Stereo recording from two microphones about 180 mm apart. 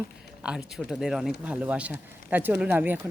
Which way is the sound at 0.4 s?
5° right (ahead or behind).